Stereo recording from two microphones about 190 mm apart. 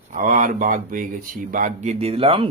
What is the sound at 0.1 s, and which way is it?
Speech, 45° right (ahead or behind).